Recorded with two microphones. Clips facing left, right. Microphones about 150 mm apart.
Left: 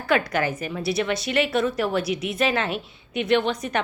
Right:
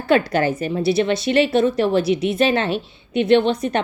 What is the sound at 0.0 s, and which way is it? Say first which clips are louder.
A woman's voice: right 5 dB; 30° right (ahead or behind).